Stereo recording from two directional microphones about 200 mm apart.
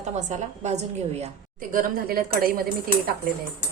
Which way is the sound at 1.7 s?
45° right (ahead or behind).